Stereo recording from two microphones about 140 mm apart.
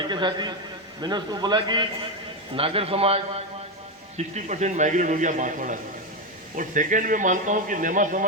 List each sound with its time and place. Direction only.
0.1 s a man's voice: 35° right (ahead or behind)
4.2 s a man's voice: 55° right (ahead or behind)